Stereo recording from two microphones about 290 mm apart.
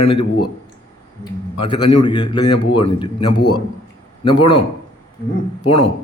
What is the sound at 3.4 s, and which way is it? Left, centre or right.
Speech, left.